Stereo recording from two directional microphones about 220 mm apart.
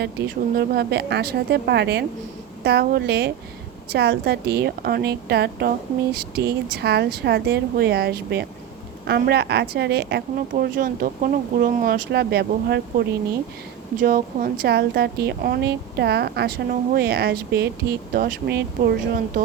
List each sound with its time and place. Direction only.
0.5 s a woman's voice: 45° right (ahead or behind)
13.9 s a woman's voice: 40° right (ahead or behind)